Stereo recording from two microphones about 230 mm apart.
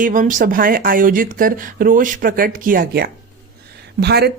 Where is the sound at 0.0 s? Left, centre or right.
Right.